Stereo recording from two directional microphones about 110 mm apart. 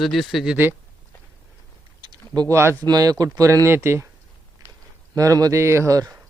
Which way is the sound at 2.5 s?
25° right (ahead or behind).